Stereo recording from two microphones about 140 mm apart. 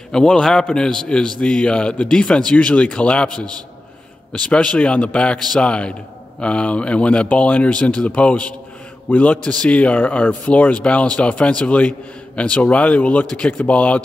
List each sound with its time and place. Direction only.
0.1 s a man's voice: 5° left (ahead or behind)
3.3 s a man's voice: 30° right (ahead or behind)
4.3 s a man's voice: 10° left (ahead or behind)